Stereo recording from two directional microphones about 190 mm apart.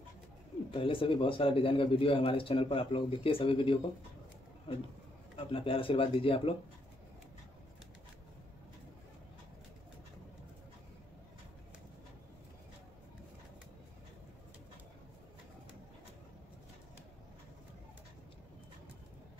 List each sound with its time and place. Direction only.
0.7 s a man's voice: 25° left (ahead or behind)
5.5 s a man's voice: 30° left (ahead or behind)